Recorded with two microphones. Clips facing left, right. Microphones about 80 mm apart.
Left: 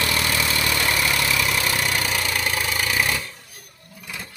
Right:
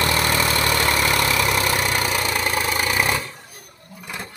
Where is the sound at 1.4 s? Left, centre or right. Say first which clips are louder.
Right 3 dB; right.